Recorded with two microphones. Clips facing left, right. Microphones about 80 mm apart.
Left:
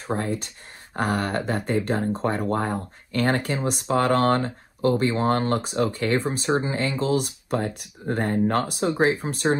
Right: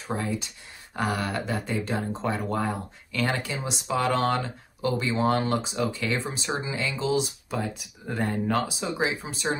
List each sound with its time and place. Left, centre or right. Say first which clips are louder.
0.0 s speech: left 3 dB; left